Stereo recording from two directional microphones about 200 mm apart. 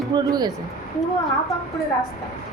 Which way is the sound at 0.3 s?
20° right (ahead or behind).